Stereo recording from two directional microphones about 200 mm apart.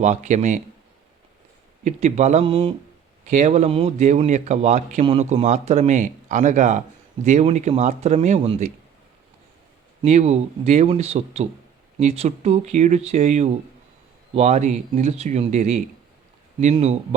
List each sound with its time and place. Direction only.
0.0 s speech: 35° right (ahead or behind)
1.8 s speech: 35° right (ahead or behind)
3.2 s speech: 35° right (ahead or behind)
10.0 s speech: 35° right (ahead or behind)